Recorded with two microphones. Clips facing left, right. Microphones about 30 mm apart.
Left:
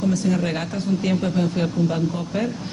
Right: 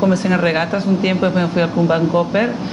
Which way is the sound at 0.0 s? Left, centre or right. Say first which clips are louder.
Right 6 dB; right.